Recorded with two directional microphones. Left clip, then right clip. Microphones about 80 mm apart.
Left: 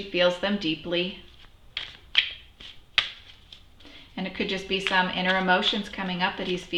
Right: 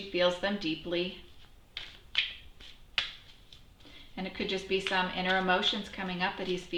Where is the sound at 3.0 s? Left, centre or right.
Left.